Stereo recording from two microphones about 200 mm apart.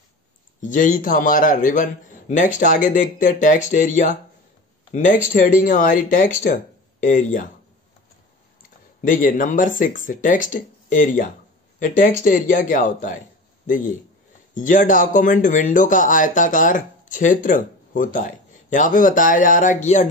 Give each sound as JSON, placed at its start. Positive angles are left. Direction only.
{"t": 0.6, "sound": "speech", "side_deg": 40}
{"t": 9.0, "sound": "speech", "side_deg": 40}
{"t": 14.5, "sound": "speech", "side_deg": 40}